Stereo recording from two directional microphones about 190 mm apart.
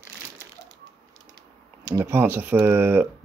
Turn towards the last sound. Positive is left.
turn(degrees=-10)  # may be behind; listen again after turning